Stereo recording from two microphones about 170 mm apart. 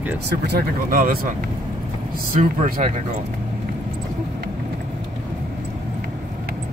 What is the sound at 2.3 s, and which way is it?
Speech, 50° right (ahead or behind).